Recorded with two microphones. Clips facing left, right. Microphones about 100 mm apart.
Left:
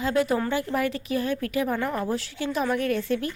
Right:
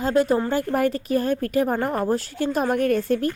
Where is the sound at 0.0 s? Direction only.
40° right (ahead or behind).